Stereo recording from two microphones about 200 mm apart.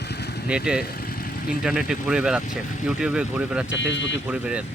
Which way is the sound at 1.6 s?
Centre (ahead or behind).